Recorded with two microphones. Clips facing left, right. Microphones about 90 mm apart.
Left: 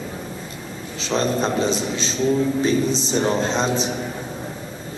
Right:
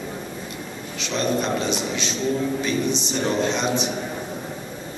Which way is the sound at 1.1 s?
35° left (ahead or behind).